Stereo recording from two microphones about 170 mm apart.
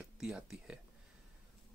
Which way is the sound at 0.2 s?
5° right (ahead or behind).